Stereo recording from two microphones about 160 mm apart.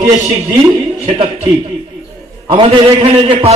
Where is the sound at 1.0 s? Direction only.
35° right (ahead or behind).